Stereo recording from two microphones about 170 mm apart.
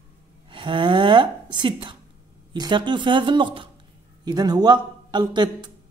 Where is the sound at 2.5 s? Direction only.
25° right (ahead or behind).